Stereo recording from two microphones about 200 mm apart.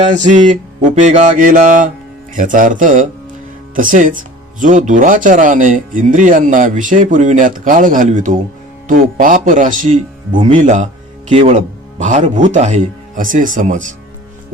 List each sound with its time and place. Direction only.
0.1 s speech: 35° right (ahead or behind)